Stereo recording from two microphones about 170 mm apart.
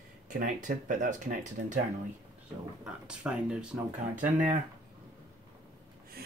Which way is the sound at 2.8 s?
5° right (ahead or behind).